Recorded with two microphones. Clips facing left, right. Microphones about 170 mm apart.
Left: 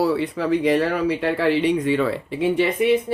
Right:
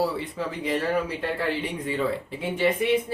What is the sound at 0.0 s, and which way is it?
Speech, 70° left (ahead or behind).